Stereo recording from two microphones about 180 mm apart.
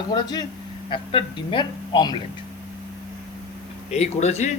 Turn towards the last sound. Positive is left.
turn(degrees=40)  # may be behind; listen again after turning